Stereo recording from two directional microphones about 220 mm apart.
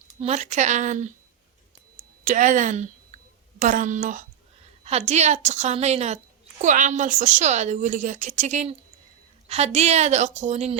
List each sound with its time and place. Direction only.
0.2 s a woman's voice: 30° right (ahead or behind)
2.2 s a woman's voice: 35° right (ahead or behind)